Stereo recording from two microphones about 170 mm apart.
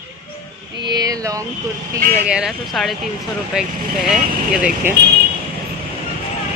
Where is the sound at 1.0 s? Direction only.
20° right (ahead or behind).